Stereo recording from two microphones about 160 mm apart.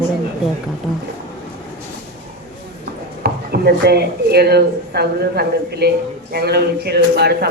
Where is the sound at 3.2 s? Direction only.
80° right.